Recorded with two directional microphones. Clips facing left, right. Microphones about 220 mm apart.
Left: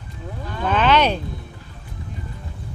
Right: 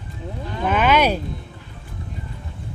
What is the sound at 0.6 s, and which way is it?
Speech, 10° right (ahead or behind).